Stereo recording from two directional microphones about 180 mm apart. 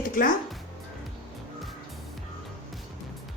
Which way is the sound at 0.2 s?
50° left (ahead or behind).